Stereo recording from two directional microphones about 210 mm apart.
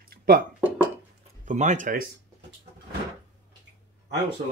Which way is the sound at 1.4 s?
35° right (ahead or behind).